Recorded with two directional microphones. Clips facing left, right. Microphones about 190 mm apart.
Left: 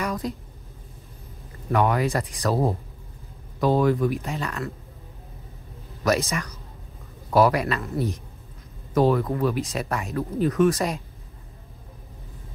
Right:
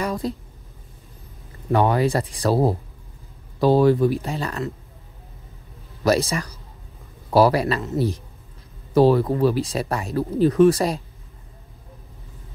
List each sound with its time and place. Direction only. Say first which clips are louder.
0.0 s a sound: right 3 dB; 30° right (ahead or behind)
1.7 s speech: right 3 dB; 30° right (ahead or behind)
6.0 s speech: right 3 dB; 30° right (ahead or behind)